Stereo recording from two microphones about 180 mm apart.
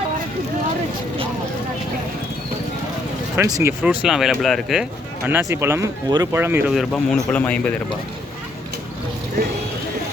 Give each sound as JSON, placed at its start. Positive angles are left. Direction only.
{"t": 3.6, "sound": "speech", "side_deg": -10}
{"t": 6.9, "sound": "a man's voice", "side_deg": 5}